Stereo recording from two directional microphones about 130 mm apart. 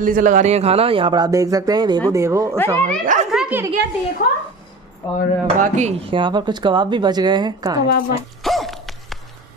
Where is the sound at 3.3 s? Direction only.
10° right (ahead or behind).